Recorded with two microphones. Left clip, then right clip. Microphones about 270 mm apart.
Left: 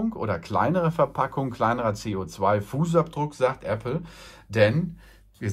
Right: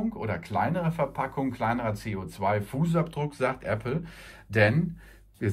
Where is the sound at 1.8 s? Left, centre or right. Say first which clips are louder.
Left 5 dB; centre.